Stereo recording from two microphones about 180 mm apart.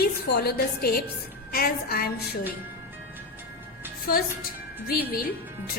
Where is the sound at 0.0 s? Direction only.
65° left (ahead or behind).